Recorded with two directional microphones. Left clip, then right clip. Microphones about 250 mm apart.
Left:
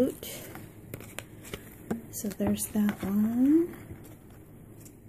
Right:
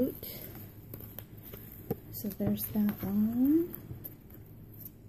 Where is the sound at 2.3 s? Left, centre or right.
Centre.